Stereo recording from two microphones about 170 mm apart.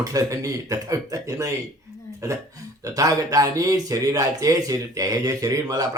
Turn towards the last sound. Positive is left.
turn(degrees=-20)  # may be behind; listen again after turning